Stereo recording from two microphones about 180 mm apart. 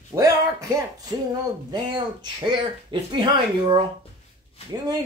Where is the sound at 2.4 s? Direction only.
25° right (ahead or behind).